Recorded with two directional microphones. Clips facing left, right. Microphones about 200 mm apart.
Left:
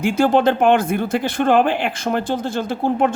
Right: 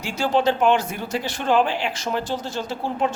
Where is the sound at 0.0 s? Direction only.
55° left (ahead or behind).